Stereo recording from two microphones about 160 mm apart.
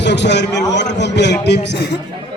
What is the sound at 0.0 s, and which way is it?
A man's voice, 90° left.